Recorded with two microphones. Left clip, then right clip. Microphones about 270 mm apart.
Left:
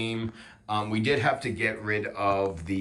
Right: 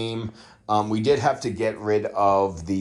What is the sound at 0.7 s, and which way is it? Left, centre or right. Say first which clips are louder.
Speech: right 6 dB; centre.